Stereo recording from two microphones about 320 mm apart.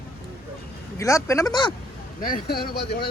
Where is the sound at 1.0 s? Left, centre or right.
Centre.